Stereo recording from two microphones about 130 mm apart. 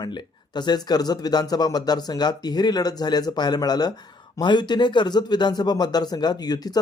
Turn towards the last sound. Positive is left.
turn(degrees=30)  # may be behind; listen again after turning